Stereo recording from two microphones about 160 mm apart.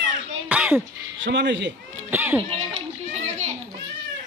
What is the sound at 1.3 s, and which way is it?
Speech, 90° right.